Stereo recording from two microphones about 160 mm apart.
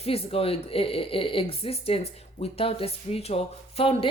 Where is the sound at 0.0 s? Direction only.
35° left (ahead or behind).